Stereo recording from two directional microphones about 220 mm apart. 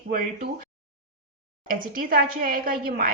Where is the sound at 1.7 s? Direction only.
40° right (ahead or behind).